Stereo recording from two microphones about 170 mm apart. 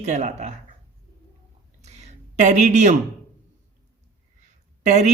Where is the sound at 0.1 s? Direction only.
40° right (ahead or behind).